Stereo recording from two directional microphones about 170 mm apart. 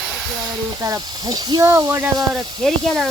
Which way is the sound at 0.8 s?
20° right (ahead or behind).